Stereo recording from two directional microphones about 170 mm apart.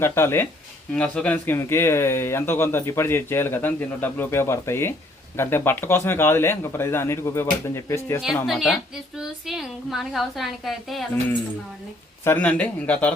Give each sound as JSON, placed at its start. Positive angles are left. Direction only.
{"t": 0.0, "sound": "speech", "side_deg": 15}
{"t": 8.4, "sound": "a woman's voice", "side_deg": 0}
{"t": 12.2, "sound": "speech", "side_deg": 10}